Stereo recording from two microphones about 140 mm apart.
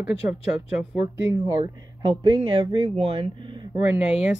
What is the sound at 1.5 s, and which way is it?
Speech, 35° right (ahead or behind).